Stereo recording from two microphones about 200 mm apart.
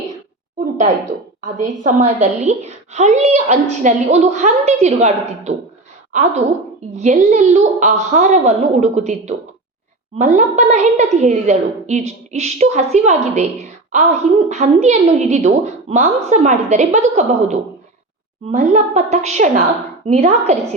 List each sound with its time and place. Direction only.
0.8 s a woman's voice: 35° right (ahead or behind)
6.9 s a woman's voice: 35° right (ahead or behind)